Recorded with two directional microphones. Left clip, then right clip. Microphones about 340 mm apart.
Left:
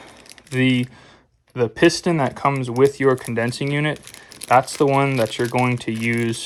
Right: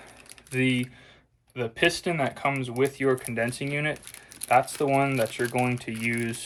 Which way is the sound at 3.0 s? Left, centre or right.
Centre.